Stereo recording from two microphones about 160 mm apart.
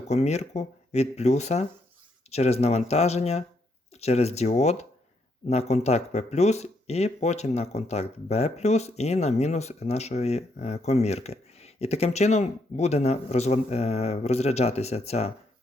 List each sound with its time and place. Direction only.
0.1 s speech: 45° left (ahead or behind)